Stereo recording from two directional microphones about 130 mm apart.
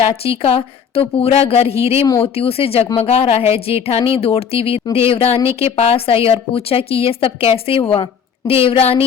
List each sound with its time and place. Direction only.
0.3 s speech: 45° left (ahead or behind)